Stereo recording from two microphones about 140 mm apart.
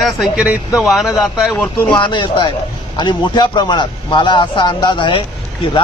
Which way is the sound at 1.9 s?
35° left (ahead or behind).